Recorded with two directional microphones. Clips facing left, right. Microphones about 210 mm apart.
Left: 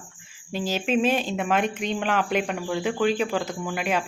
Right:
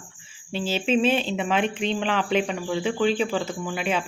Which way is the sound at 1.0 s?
40° left (ahead or behind).